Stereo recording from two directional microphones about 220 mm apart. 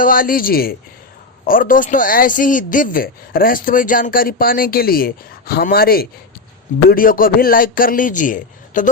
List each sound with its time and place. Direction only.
0.0 s speech: 40° left (ahead or behind)